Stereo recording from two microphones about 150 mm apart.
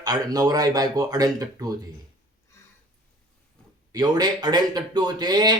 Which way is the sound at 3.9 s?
25° right (ahead or behind).